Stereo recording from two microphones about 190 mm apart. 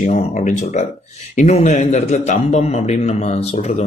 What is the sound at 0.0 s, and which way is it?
A man's voice, 40° left (ahead or behind).